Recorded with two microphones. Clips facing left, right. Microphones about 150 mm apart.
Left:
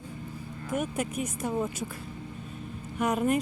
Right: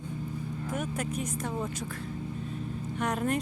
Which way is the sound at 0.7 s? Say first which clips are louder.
Left 4 dB; 10° left (ahead or behind).